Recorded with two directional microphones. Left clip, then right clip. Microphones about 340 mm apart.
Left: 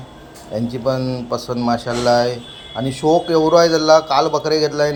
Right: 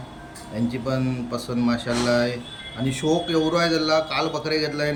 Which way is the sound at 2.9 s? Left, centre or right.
Left.